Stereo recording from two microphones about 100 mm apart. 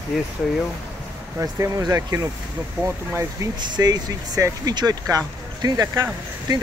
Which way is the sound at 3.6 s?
45° right (ahead or behind).